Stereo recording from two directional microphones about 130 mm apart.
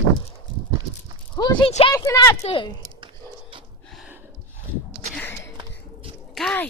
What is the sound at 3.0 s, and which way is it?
Whispering, 40° right (ahead or behind).